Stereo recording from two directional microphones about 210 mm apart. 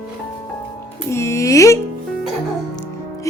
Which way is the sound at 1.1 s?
15° left (ahead or behind).